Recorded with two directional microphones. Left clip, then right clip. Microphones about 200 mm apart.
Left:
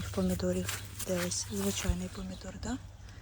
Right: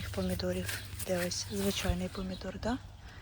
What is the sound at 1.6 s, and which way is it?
Speech, centre (ahead or behind).